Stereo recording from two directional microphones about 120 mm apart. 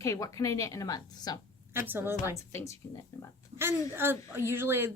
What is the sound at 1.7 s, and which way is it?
Speech, 20° right (ahead or behind).